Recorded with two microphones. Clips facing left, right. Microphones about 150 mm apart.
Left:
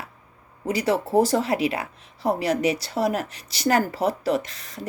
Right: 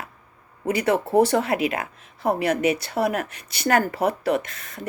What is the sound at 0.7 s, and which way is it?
Speech, 55° right (ahead or behind).